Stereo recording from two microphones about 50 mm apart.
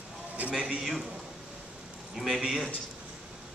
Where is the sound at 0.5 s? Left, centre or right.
Right.